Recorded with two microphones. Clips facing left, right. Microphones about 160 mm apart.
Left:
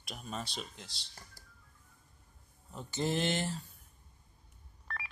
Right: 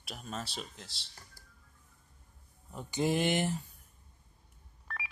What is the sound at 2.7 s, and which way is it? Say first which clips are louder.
Speech: right 3 dB; 15° right (ahead or behind).